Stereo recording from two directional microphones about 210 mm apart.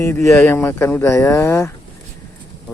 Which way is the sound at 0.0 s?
15° left (ahead or behind).